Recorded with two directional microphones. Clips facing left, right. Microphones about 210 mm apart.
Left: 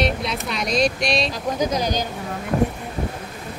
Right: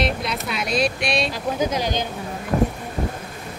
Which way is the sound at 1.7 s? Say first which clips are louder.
Left 1 dB; 40° left (ahead or behind).